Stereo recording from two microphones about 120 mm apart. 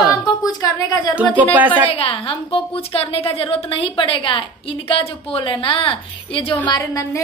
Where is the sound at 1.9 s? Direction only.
50° left (ahead or behind).